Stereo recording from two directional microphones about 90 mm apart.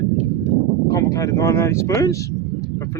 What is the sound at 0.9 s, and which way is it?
Speech, 40° left (ahead or behind).